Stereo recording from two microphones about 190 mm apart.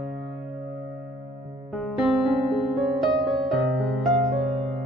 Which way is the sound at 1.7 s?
Centre (ahead or behind).